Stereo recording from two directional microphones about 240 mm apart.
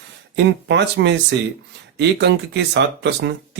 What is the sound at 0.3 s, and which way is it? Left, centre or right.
Speech, right.